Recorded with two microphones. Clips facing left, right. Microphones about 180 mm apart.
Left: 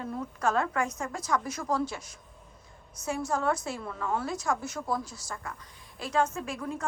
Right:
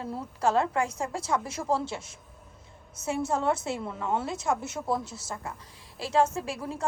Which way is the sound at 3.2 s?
25° right (ahead or behind).